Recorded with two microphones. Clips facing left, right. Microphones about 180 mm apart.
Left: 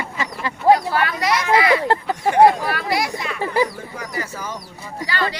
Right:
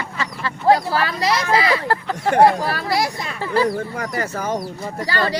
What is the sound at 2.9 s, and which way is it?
Speech, 35° right (ahead or behind).